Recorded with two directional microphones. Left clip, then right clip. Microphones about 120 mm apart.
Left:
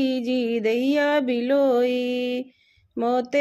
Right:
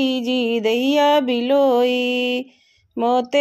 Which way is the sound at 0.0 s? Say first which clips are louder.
Right 4 dB; 20° right (ahead or behind).